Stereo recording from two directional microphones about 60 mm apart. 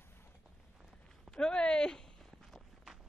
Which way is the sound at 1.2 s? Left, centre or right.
Centre.